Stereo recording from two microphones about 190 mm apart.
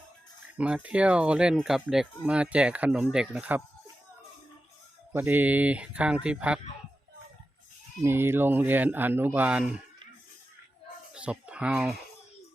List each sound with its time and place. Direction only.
0.5 s speech: 5° right (ahead or behind)
5.1 s speech: 10° right (ahead or behind)
8.0 s speech: 10° right (ahead or behind)
11.1 s speech: 5° right (ahead or behind)